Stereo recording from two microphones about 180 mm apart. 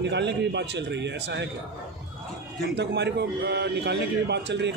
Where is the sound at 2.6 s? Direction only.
70° right (ahead or behind).